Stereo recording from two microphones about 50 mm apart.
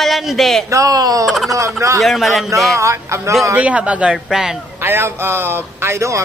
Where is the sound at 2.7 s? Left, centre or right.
Right.